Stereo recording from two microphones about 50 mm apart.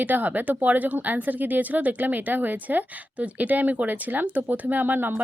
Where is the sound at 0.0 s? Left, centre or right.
Right.